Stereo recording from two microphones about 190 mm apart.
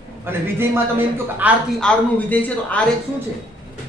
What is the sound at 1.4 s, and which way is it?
Speech, 10° right (ahead or behind).